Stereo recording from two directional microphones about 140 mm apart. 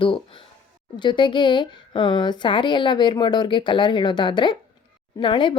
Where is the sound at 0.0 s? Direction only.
40° left (ahead or behind).